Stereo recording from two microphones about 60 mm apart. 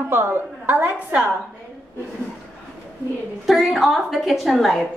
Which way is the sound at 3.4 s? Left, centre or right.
Centre.